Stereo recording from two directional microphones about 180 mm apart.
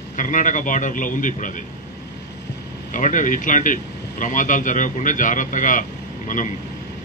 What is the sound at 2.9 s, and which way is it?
A man's voice, 45° left (ahead or behind).